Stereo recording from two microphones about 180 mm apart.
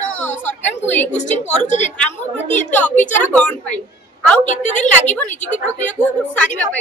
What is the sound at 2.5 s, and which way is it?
Speech, 40° left (ahead or behind).